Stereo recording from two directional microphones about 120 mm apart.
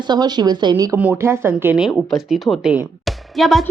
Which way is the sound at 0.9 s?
10° right (ahead or behind).